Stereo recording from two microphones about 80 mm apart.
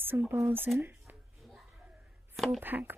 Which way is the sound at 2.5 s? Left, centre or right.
Right.